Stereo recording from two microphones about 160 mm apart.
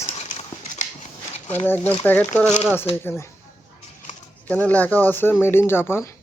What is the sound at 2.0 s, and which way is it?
Speech, 10° left (ahead or behind).